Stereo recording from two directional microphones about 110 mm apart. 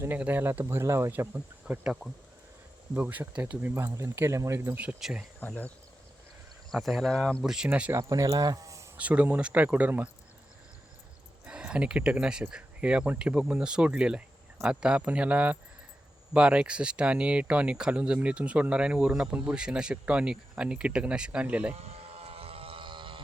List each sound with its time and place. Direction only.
0.0 s speech: 15° right (ahead or behind)
4.8 s speech: 10° right (ahead or behind)
5.5 s speech: 15° left (ahead or behind)
6.7 s speech: centre (ahead or behind)
8.1 s speech: 35° right (ahead or behind)
9.0 s speech: 15° right (ahead or behind)
11.4 s speech: 10° right (ahead or behind)
21.8 s a sound: 65° right (ahead or behind); by 23.2 s 50° right (ahead or behind)